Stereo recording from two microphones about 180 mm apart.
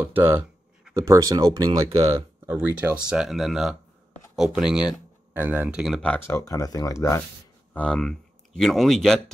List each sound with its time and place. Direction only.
0.0 s speech: 10° right (ahead or behind)
6.0 s speech: 15° left (ahead or behind)